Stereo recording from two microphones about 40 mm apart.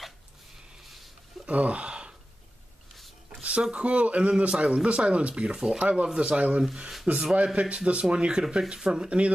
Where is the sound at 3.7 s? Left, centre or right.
Right; by 9.1 s centre.